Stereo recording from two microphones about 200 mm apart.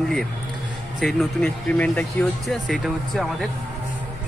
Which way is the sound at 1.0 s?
5° left (ahead or behind).